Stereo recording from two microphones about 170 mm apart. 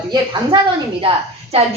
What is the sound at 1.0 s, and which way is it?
Speech, 35° right (ahead or behind).